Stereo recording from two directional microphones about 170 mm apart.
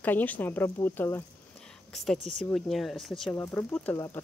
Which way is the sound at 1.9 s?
5° left (ahead or behind).